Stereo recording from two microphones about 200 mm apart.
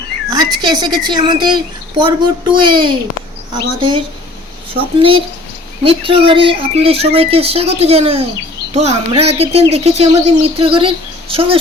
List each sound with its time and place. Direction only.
0.3 s a child's voice: 20° right (ahead or behind)